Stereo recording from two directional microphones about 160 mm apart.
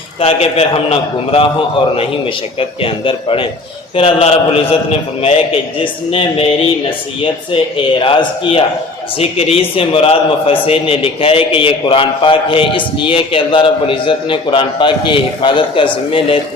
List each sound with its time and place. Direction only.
0.2 s a man's voice: 40° left (ahead or behind)
7.5 s a man's voice: 30° left (ahead or behind)